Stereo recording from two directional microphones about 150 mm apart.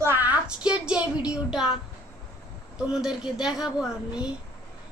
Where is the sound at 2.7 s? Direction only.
5° right (ahead or behind).